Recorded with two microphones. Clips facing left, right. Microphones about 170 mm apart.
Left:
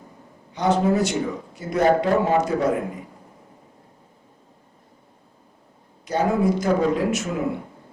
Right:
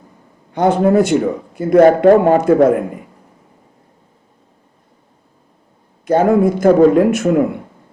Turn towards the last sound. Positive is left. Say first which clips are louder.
# right 11 dB
turn(degrees=-55)  # may be behind; listen again after turning